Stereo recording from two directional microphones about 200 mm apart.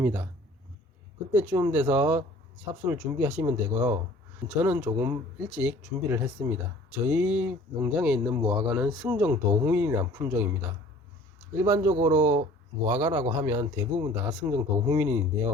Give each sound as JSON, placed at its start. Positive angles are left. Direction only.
{"t": 0.0, "sound": "speech", "side_deg": -10}
{"t": 1.3, "sound": "speech", "side_deg": -10}
{"t": 8.4, "sound": "speech", "side_deg": -25}
{"t": 8.6, "sound": "speech", "side_deg": -5}